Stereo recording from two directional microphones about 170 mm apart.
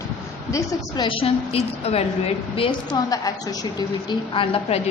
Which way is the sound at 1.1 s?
35° left (ahead or behind).